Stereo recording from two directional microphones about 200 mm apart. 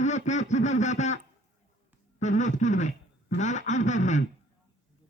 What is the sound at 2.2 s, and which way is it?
Speech, 35° left (ahead or behind).